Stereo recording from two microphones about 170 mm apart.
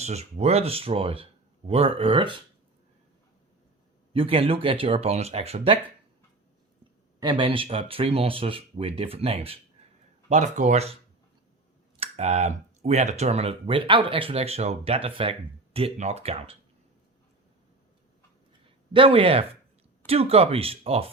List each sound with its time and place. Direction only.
0.0 s speech: 40° right (ahead or behind)
4.1 s speech: 30° right (ahead or behind)
7.2 s speech: 30° right (ahead or behind)
11.9 s speech: 40° right (ahead or behind)
18.9 s speech: 30° right (ahead or behind)